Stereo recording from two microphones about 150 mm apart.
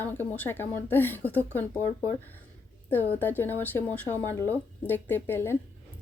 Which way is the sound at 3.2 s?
15° left (ahead or behind).